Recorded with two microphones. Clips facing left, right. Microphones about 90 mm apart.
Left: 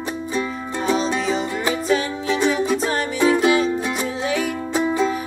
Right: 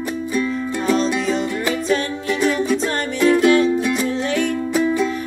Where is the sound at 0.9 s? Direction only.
Centre (ahead or behind); by 2.7 s 15° left (ahead or behind).